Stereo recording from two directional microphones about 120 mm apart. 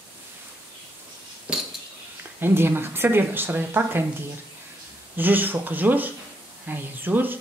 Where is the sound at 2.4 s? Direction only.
20° right (ahead or behind).